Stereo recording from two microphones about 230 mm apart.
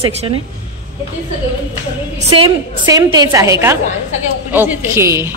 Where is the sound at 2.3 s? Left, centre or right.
Centre.